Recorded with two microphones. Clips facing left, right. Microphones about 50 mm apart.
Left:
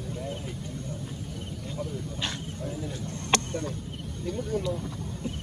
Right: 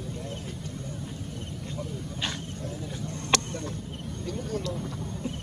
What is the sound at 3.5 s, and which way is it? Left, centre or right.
Speech, centre.